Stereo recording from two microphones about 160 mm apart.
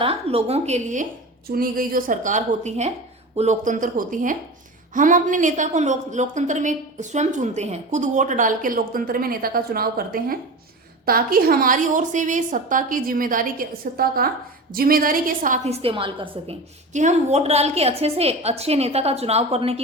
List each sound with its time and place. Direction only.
0.0 s a woman's voice: 35° right (ahead or behind)
1.5 s a woman's voice: 65° right (ahead or behind); by 16.6 s 35° right (ahead or behind)
16.9 s a woman's voice: 45° right (ahead or behind)